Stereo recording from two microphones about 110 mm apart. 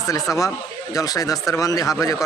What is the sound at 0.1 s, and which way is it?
Speech, 30° left (ahead or behind).